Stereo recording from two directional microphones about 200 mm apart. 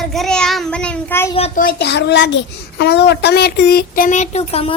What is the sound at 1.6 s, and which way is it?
A child's voice, 55° left (ahead or behind).